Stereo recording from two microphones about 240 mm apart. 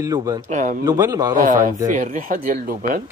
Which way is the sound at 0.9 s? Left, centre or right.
Centre.